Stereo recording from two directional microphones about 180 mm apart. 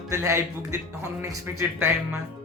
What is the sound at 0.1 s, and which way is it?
Speech, 15° right (ahead or behind).